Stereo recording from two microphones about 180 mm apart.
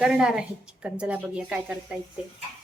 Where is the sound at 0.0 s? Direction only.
5° right (ahead or behind).